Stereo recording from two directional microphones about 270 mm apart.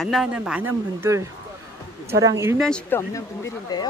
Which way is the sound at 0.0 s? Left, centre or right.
Centre.